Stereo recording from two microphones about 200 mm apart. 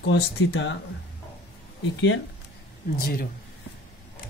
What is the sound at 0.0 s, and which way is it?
Speech, 65° left (ahead or behind).